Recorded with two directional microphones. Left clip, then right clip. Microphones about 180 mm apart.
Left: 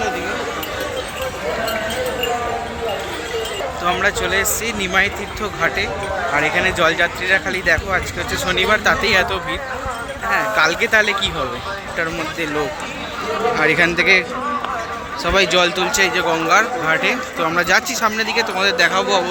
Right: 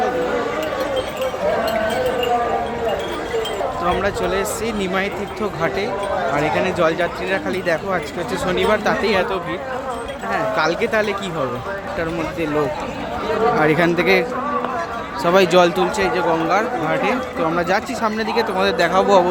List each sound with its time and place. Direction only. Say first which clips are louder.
3.8 s speech: left 3 dB; 5° right (ahead or behind)
13.6 s a man's voice: left 1 dB; 20° right (ahead or behind)
15.9 s speech: left 2 dB; 5° right (ahead or behind); by 19.2 s 25° right (ahead or behind)